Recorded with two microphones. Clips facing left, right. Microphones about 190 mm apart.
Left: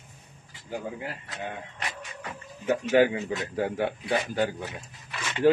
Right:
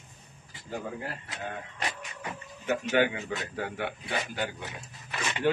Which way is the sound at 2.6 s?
35° left (ahead or behind).